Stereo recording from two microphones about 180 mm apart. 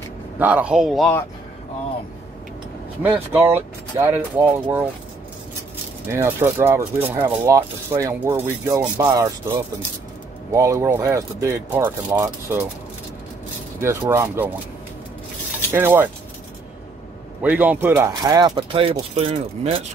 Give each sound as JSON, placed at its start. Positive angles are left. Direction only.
{"t": 0.4, "sound": "a man's voice", "side_deg": -10}
{"t": 3.0, "sound": "speech", "side_deg": -10}
{"t": 6.1, "sound": "speech", "side_deg": -10}
{"t": 10.5, "sound": "speech", "side_deg": -15}
{"t": 13.7, "sound": "speech", "side_deg": -15}
{"t": 15.7, "sound": "speech", "side_deg": -10}
{"t": 17.4, "sound": "speech", "side_deg": -10}